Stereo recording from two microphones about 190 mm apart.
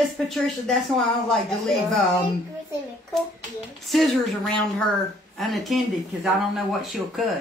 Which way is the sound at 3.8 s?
Centre (ahead or behind).